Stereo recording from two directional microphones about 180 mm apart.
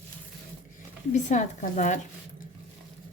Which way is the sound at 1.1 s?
40° left (ahead or behind).